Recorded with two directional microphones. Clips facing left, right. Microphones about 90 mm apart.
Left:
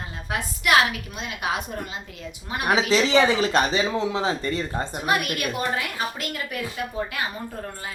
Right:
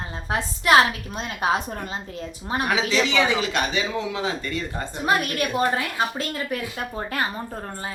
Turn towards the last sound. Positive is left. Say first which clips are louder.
# right 1 dB
turn(degrees=-40)  # may be behind; listen again after turning